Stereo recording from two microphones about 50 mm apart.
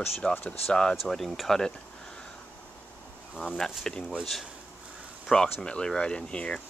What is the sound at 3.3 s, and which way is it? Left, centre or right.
Speech, centre.